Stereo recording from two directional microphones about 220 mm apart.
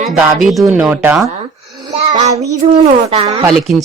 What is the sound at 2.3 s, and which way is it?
Speech, 15° right (ahead or behind).